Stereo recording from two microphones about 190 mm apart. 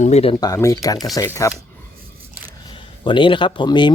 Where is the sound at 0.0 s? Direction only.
35° left (ahead or behind).